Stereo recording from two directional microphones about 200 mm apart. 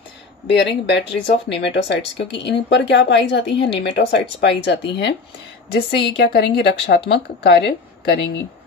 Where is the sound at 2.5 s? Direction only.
60° left (ahead or behind).